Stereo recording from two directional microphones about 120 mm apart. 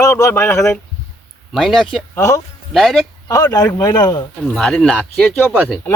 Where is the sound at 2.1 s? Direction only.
25° left (ahead or behind).